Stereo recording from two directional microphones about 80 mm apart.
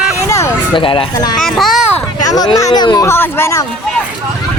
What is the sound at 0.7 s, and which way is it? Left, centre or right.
Speech, left.